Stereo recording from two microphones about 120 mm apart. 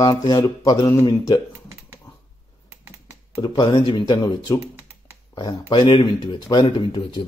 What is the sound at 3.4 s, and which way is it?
Speech, 35° left (ahead or behind).